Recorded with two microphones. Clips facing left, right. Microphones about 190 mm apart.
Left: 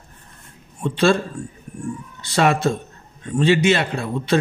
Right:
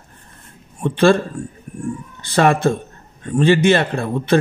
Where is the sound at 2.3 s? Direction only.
55° right (ahead or behind).